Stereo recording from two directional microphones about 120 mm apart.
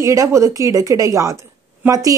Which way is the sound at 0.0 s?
25° right (ahead or behind).